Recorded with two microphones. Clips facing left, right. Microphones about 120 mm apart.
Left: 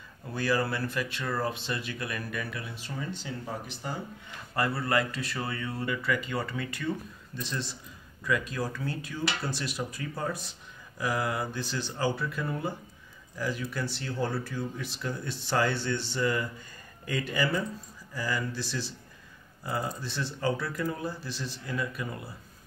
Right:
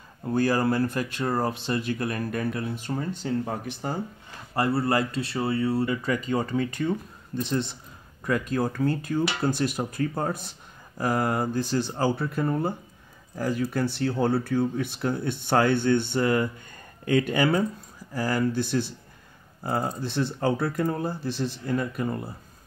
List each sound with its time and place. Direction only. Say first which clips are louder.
0.2 s speech: right 6 dB; 45° right (ahead or behind)
4.6 s speech: right 4 dB; 30° right (ahead or behind)
7.3 s speech: right 9 dB; 50° right (ahead or behind)